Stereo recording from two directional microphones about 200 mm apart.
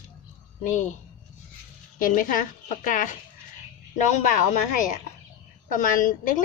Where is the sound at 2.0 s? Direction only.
40° left (ahead or behind).